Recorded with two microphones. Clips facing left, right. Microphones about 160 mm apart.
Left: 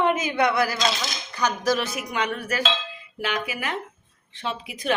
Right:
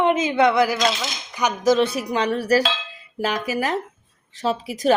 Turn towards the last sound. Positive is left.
turn(degrees=-35)  # may be behind; listen again after turning